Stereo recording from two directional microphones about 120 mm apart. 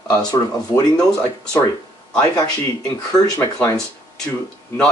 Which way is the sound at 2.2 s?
30° left (ahead or behind).